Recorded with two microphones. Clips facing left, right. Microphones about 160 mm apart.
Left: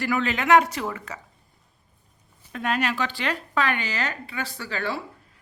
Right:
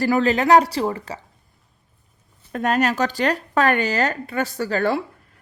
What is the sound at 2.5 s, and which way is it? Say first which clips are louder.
Speech: right 6 dB; 45° right (ahead or behind).